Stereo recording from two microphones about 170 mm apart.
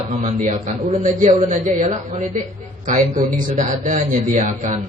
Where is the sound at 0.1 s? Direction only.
45° right (ahead or behind).